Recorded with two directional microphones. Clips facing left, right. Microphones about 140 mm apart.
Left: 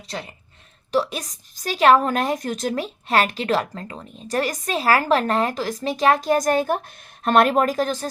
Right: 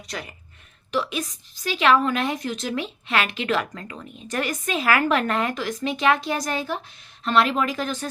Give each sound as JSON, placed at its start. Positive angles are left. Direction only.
{"t": 0.1, "sound": "a woman's voice", "side_deg": 30}